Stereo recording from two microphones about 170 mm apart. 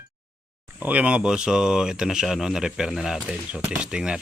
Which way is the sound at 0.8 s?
10° right (ahead or behind).